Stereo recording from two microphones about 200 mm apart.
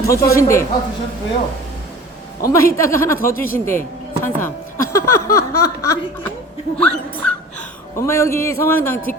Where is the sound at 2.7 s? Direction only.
15° left (ahead or behind).